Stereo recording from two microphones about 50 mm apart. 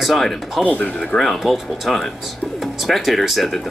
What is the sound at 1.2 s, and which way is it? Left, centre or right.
Speech, centre.